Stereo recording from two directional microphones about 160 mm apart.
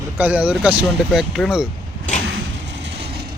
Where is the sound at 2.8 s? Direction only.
90° right.